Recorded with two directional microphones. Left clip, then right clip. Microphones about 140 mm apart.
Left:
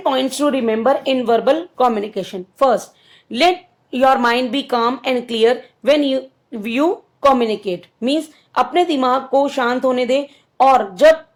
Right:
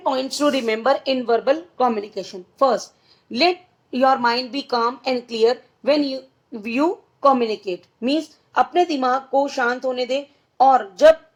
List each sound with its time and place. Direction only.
0.0 s a woman's voice: 35° left (ahead or behind)